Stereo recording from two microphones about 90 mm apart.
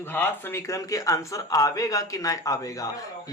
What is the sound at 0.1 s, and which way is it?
Speech, 25° left (ahead or behind).